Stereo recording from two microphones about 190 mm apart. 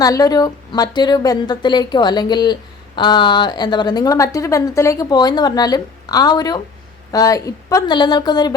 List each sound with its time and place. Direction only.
0.0 s a woman's voice: 20° left (ahead or behind)